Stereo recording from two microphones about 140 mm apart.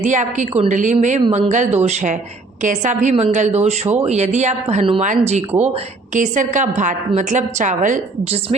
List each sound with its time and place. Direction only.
0.0 s a woman's voice: 60° right (ahead or behind)
6.1 s a woman's voice: 65° right (ahead or behind)